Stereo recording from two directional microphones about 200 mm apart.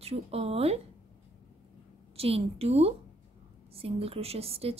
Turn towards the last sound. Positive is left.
turn(degrees=-30)  # may be behind; listen again after turning